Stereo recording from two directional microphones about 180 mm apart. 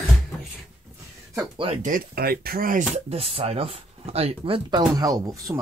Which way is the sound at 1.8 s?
55° right (ahead or behind).